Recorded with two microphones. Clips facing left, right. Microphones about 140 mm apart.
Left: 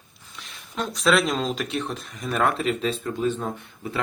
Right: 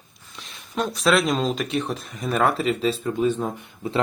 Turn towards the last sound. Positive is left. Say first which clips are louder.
# right 5 dB
turn(degrees=-25)  # may be behind; listen again after turning